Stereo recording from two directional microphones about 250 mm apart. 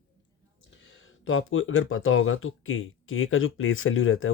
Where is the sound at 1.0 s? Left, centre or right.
Left.